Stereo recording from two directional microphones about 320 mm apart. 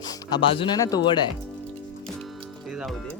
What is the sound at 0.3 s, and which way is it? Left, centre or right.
Speech, centre.